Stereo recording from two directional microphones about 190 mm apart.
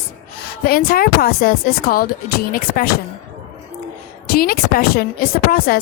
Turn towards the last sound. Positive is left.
turn(degrees=50)  # may be behind; listen again after turning